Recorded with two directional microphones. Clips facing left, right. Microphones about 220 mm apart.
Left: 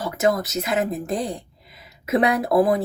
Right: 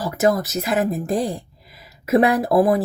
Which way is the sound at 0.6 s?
30° right (ahead or behind).